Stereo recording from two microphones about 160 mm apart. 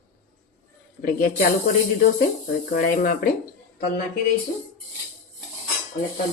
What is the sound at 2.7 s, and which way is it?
Speech, 65° left (ahead or behind).